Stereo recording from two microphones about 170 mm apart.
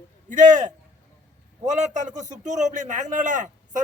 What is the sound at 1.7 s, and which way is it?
A man's voice, 45° right (ahead or behind).